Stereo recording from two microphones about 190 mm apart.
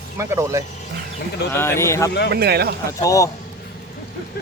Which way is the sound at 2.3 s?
55° right (ahead or behind).